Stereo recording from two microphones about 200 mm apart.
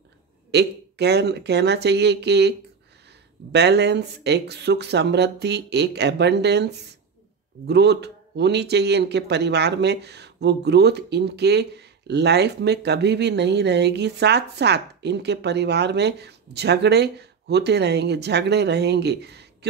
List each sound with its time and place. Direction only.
0.5 s speech: 55° right (ahead or behind)
3.5 s speech: 55° right (ahead or behind)